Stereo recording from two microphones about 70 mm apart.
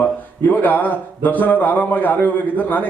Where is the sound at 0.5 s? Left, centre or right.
Left.